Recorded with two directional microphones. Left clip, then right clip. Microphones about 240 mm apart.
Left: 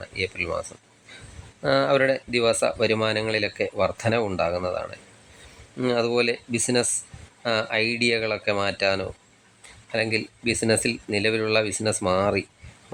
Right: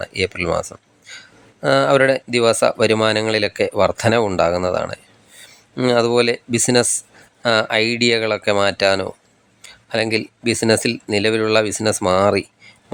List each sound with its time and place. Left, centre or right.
0.0 s speech: centre
1.6 s speech: centre